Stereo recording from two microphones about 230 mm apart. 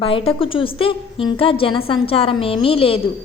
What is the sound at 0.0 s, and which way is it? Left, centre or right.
A woman's voice, left.